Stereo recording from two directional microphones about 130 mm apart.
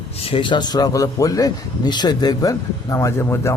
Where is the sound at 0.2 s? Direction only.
45° left (ahead or behind).